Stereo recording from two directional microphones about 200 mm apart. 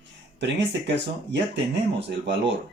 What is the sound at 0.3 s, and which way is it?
Speech, 60° right (ahead or behind).